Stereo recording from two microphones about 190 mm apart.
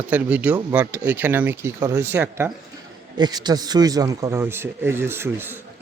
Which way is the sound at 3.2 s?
20° right (ahead or behind).